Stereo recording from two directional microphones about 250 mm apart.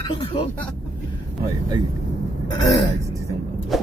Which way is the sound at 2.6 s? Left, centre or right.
Centre.